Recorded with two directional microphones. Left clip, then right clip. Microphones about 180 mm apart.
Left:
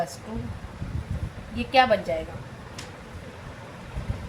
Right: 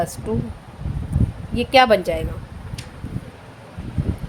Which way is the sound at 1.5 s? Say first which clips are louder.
Right 6 dB; 70° right (ahead or behind).